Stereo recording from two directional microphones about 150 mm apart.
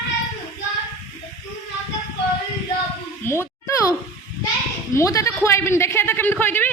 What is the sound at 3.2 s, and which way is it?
Speech, 15° left (ahead or behind).